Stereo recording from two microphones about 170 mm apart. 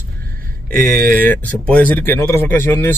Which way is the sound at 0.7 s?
55° right (ahead or behind).